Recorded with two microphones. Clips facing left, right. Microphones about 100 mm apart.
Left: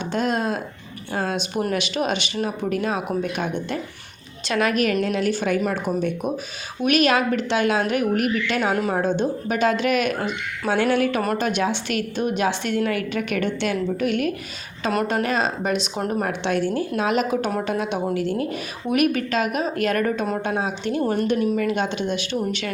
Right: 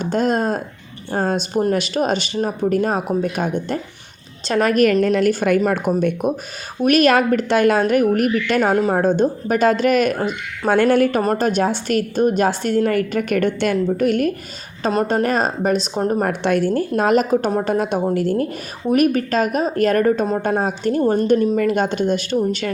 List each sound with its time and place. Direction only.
0.0 s a woman's voice: 40° right (ahead or behind)
14.8 s speech: 30° right (ahead or behind)
16.2 s a woman's voice: 45° right (ahead or behind)